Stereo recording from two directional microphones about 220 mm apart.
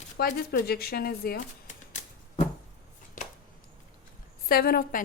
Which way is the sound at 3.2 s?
35° left (ahead or behind).